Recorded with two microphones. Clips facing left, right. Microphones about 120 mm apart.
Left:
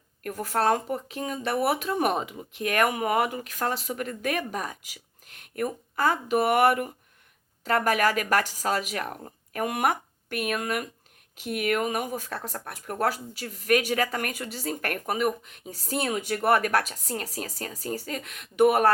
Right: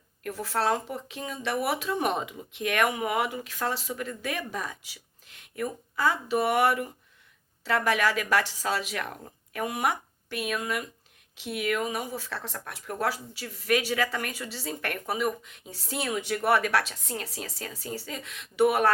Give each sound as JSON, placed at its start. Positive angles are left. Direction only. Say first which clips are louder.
{"t": 0.2, "sound": "speech", "louder": "left 2 dB", "side_deg": 50}